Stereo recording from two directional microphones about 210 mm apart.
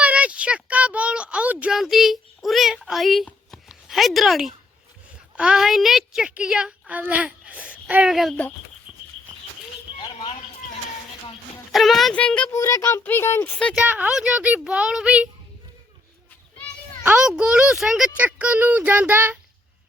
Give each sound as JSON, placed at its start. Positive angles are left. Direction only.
{"t": 0.0, "sound": "a sound", "side_deg": -5}
{"t": 5.4, "sound": "speech", "side_deg": -5}
{"t": 10.0, "sound": "a sound", "side_deg": 20}
{"t": 11.7, "sound": "a child's voice", "side_deg": 0}
{"t": 13.7, "sound": "speech", "side_deg": -10}
{"t": 17.0, "sound": "a child's voice", "side_deg": -5}